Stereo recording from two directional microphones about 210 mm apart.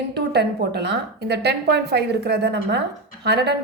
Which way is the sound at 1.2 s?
50° right (ahead or behind).